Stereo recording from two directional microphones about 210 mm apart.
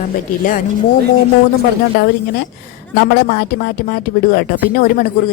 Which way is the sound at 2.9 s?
45° left (ahead or behind).